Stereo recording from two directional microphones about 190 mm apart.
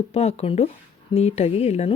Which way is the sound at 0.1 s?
35° left (ahead or behind).